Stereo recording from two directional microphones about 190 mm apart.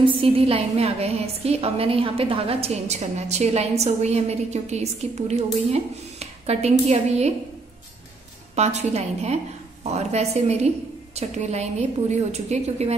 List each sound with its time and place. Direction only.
0.0 s a woman's voice: 30° right (ahead or behind)
8.5 s a woman's voice: 35° right (ahead or behind)